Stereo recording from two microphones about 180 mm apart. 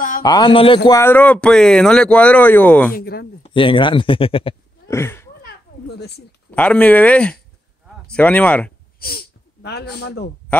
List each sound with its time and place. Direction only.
0.2 s speech: 25° left (ahead or behind)
0.8 s speech: 15° left (ahead or behind)
2.9 s speech: 55° left (ahead or behind)
3.4 s speech: 30° left (ahead or behind)
4.8 s a sound: 15° left (ahead or behind)
5.4 s a sound: 65° left (ahead or behind)
6.5 s speech: 10° left (ahead or behind)
9.0 s speech: 60° left (ahead or behind)